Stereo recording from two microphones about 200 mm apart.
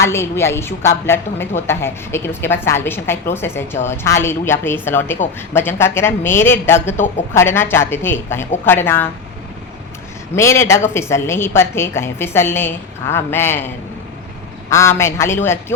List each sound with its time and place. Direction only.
0.0 s a woman's voice: 15° left (ahead or behind)
10.3 s a woman's voice: 15° left (ahead or behind)
14.7 s a woman's voice: 15° left (ahead or behind)